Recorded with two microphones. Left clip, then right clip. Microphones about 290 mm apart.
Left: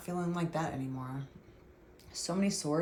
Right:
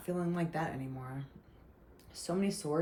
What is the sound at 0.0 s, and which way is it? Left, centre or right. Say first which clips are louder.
Speech: even; centre.